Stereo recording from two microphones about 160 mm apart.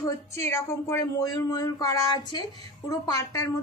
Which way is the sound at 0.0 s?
20° left (ahead or behind).